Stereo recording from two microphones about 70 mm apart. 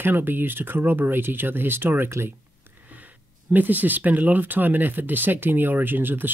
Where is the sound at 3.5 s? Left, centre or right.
Right.